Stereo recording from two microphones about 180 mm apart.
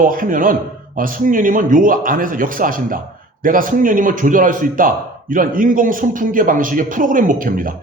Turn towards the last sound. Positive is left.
turn(degrees=-50)  # may be behind; listen again after turning